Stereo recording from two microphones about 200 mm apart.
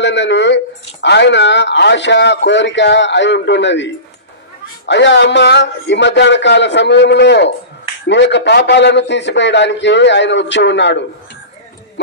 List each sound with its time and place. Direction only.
0.0 s a man's voice: 65° left (ahead or behind)